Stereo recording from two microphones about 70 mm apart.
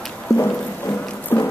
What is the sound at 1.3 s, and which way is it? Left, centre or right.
Music, left.